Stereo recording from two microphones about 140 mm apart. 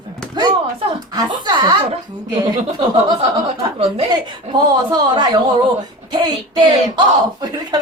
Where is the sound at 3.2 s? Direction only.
45° right (ahead or behind).